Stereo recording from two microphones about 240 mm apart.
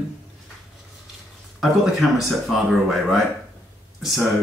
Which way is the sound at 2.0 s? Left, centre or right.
Centre.